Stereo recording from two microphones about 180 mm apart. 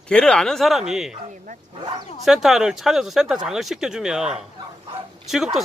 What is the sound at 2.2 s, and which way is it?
Speech, centre (ahead or behind).